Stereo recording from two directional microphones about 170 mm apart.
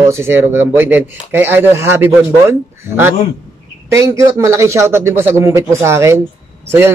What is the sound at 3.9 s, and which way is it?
Speech, 15° right (ahead or behind).